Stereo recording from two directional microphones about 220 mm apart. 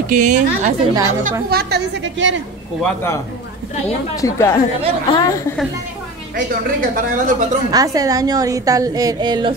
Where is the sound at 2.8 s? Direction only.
10° left (ahead or behind).